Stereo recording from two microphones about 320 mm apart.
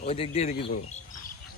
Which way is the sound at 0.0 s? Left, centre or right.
Centre.